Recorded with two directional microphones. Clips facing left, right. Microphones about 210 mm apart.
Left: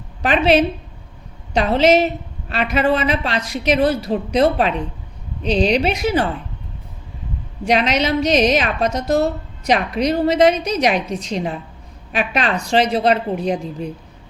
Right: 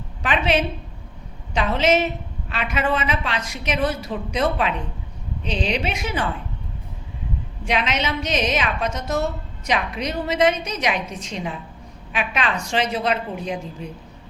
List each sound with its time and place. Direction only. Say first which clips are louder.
0.2 s a woman's voice: left 6 dB; 35° left (ahead or behind)
7.6 s a woman's voice: left 6 dB; 40° left (ahead or behind)